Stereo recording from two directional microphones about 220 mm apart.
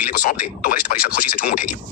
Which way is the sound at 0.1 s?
40° left (ahead or behind).